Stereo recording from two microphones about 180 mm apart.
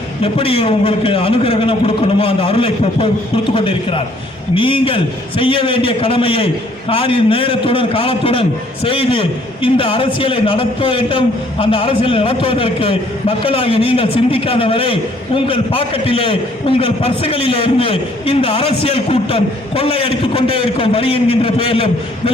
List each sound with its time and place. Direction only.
0.2 s a man's voice: 30° left (ahead or behind)